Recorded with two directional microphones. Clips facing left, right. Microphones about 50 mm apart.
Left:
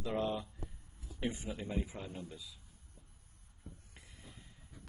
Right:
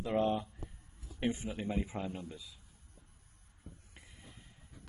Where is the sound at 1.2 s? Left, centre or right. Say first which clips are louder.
Right 4 dB; right.